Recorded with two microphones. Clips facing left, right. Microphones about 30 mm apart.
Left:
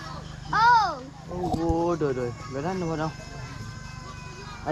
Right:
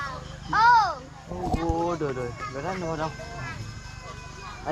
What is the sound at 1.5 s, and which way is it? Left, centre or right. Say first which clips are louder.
Speech: left 2 dB; right.